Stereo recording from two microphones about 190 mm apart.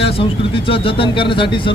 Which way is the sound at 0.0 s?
30° left (ahead or behind).